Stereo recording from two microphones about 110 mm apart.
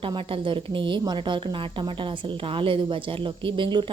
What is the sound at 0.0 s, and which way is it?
A woman's voice, 50° right (ahead or behind).